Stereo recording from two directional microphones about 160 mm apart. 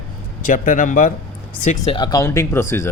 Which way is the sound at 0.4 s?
55° left (ahead or behind).